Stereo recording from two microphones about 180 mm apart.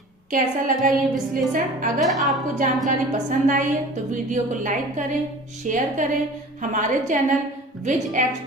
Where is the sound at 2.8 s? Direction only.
45° right (ahead or behind).